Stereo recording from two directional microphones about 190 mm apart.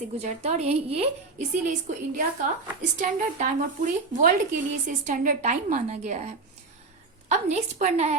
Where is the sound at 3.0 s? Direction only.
45° right (ahead or behind).